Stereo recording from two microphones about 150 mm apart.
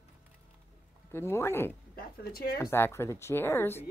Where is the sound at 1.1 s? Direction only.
15° left (ahead or behind).